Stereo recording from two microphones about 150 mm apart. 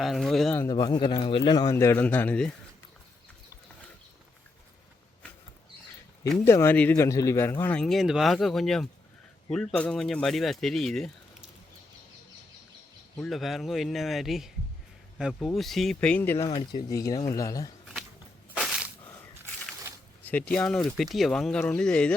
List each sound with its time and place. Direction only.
0.0 s speech: centre (ahead or behind)
0.7 s a man's voice: 25° left (ahead or behind); by 2.6 s 5° left (ahead or behind)
6.4 s speech: 15° left (ahead or behind)
13.3 s speech: centre (ahead or behind); by 16.5 s 15° left (ahead or behind)
16.5 s speech: 35° left (ahead or behind)
16.9 s a man's voice: 20° left (ahead or behind)
18.5 s a sound: 5° right (ahead or behind)
20.2 s speech: 10° left (ahead or behind)